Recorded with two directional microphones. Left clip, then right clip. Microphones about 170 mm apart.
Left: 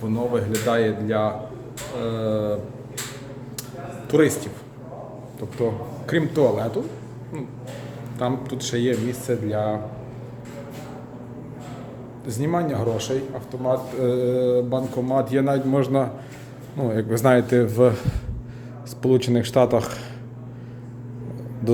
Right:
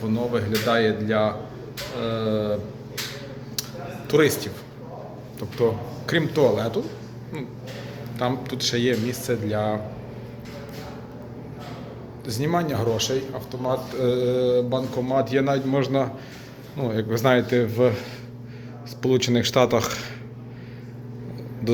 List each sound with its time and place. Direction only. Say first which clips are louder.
0.1 s a man's voice: left 1 dB; 15° left (ahead or behind)
4.1 s a man's voice: even; 10° left (ahead or behind)
6.1 s a man's voice: even; 10° left (ahead or behind)
8.2 s a man's voice: right 1 dB; 15° left (ahead or behind)
12.2 s a man's voice: even; 10° left (ahead or behind); by 18.0 s 40° left (ahead or behind)
19.0 s speech: left 1 dB; 25° left (ahead or behind)